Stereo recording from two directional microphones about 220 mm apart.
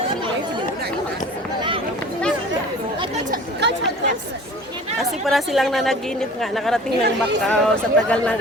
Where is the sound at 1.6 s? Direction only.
20° right (ahead or behind).